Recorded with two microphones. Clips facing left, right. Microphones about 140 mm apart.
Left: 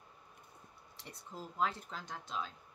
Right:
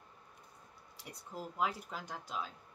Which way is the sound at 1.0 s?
10° right (ahead or behind).